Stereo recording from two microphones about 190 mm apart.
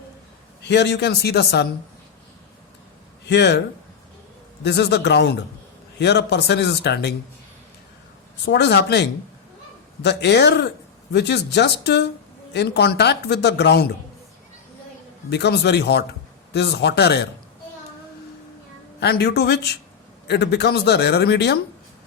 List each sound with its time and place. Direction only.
0.6 s speech: 65° left (ahead or behind)
3.2 s speech: 65° left (ahead or behind)
4.6 s speech: 60° left (ahead or behind)
8.4 s speech: 60° left (ahead or behind)
15.3 s speech: 60° left (ahead or behind)
18.9 s speech: 55° left (ahead or behind)